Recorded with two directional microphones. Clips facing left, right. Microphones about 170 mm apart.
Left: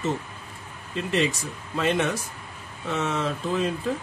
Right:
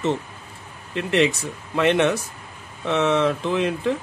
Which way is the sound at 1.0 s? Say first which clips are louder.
Right 5 dB; 70° right (ahead or behind).